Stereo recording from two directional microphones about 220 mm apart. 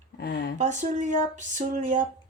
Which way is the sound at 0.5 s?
35° right (ahead or behind).